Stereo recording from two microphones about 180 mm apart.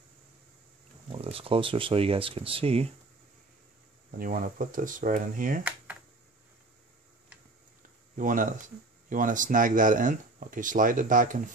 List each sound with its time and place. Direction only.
1.1 s speech: 30° right (ahead or behind)
4.2 s speech: 50° right (ahead or behind)
8.2 s speech: 45° right (ahead or behind)